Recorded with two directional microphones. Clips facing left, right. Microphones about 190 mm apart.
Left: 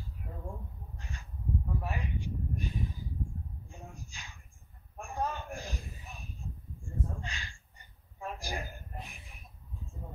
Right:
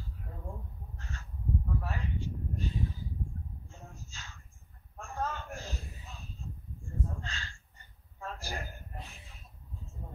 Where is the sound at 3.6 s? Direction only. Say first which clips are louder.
Left 2 dB; 15° left (ahead or behind).